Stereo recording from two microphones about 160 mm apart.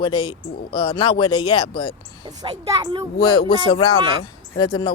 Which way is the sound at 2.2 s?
25° right (ahead or behind).